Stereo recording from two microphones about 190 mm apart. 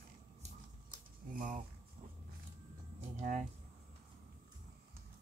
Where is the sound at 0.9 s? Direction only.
45° right (ahead or behind).